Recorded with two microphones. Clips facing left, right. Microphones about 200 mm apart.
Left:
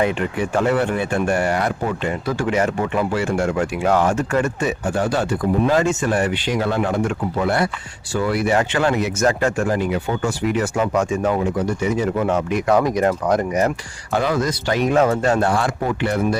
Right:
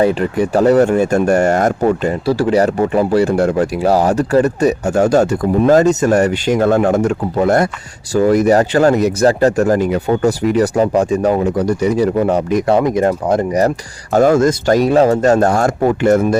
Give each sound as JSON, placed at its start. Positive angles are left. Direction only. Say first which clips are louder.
{"t": 0.0, "sound": "speech", "louder": "right 6 dB", "side_deg": -35}
{"t": 12.7, "sound": "speech", "louder": "right 2 dB", "side_deg": -25}